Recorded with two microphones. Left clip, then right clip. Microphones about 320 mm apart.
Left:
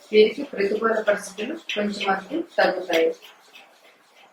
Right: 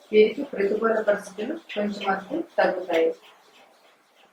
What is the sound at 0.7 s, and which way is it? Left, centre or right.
Speech, centre.